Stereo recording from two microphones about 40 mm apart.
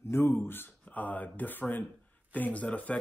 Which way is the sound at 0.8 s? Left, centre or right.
Left.